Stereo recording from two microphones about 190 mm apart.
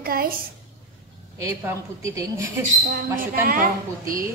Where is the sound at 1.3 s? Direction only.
15° right (ahead or behind).